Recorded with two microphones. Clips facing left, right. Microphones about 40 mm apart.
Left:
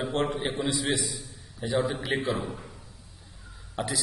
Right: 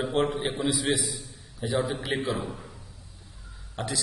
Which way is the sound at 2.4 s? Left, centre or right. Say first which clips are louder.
Even; centre.